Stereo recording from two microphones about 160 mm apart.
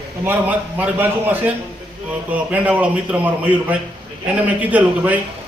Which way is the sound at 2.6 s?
10° right (ahead or behind).